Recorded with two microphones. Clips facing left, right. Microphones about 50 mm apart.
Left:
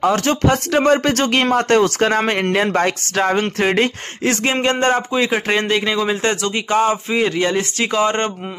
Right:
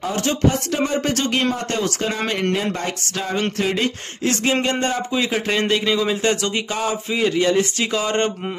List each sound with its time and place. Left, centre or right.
0.0 s speech: left
5.1 s speech: left
6.2 s speech: left